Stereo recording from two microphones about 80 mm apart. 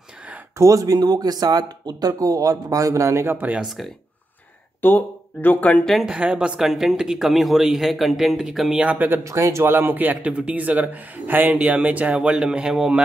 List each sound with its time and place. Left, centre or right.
0.6 s speech: right
3.3 s speech: right
3.6 s a man's voice: centre
4.8 s speech: left
5.9 s a man's voice: centre
6.1 s speech: centre
6.6 s a man's voice: centre
8.8 s speech: right
9.2 s speech: right; by 13.0 s centre